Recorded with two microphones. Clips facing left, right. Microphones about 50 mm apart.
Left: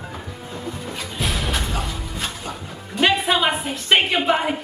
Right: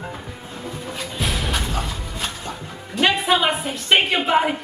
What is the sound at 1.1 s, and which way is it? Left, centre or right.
Music, centre.